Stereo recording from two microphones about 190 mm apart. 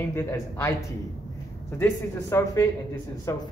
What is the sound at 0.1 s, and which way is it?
Speech, 15° left (ahead or behind).